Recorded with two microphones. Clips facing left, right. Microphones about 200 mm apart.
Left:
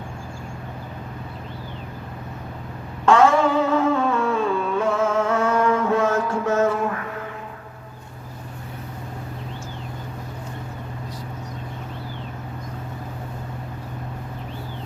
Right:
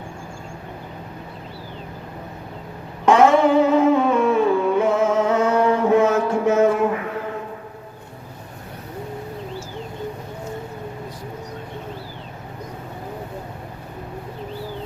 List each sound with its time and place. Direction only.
3.1 s music: 20° right (ahead or behind)